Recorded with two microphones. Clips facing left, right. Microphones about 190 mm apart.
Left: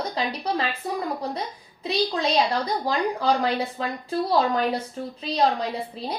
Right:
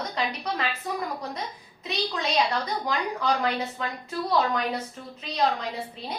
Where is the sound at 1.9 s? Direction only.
30° left (ahead or behind).